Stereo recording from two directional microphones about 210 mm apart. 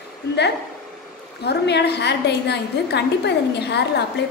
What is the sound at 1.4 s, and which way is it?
A woman's voice, 50° left (ahead or behind).